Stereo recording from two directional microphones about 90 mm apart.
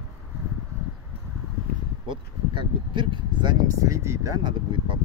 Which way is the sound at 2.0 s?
65° right (ahead or behind).